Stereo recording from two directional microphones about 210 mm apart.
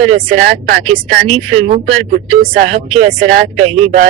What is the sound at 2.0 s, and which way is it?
Speech, 45° right (ahead or behind).